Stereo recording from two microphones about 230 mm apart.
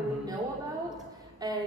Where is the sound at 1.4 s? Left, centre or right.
Centre.